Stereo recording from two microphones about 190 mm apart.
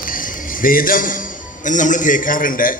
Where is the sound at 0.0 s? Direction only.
45° left (ahead or behind).